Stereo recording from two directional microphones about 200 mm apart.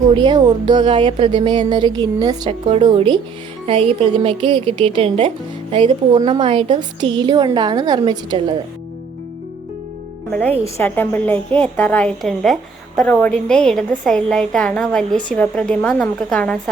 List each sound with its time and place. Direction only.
0.1 s speech: 20° right (ahead or behind)
10.8 s a woman's voice: 10° left (ahead or behind)